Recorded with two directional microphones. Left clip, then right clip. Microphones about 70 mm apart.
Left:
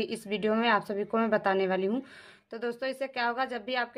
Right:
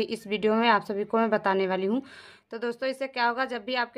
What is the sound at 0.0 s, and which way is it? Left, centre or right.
Speech, right.